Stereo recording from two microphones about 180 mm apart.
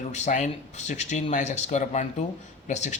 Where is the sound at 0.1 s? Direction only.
40° left (ahead or behind).